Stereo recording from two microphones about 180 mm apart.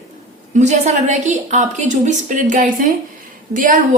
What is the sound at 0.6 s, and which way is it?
Speech, 40° right (ahead or behind).